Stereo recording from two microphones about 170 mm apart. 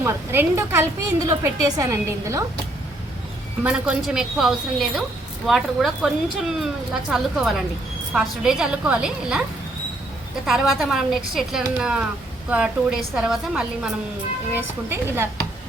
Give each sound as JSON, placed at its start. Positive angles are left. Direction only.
{"t": 0.0, "sound": "a woman's voice", "side_deg": -15}
{"t": 3.6, "sound": "a woman's voice", "side_deg": -5}
{"t": 10.4, "sound": "a woman's voice", "side_deg": 0}
{"t": 14.5, "sound": "a woman's voice", "side_deg": -15}